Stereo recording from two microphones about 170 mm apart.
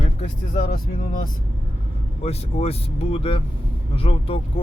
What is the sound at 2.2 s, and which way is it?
Speech, 35° left (ahead or behind).